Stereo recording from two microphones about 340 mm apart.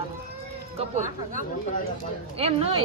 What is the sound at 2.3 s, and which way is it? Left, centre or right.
Speech, centre.